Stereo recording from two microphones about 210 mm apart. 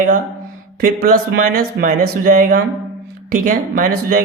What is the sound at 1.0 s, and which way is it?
Speech, 45° right (ahead or behind).